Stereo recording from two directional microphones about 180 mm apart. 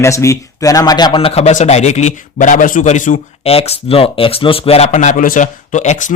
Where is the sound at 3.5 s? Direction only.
30° left (ahead or behind).